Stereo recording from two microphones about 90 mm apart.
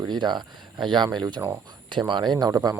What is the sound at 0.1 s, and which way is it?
Speech, 55° right (ahead or behind).